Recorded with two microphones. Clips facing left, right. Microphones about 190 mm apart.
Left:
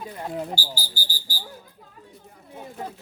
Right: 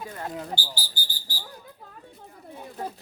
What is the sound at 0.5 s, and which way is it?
Speech, 40° left (ahead or behind).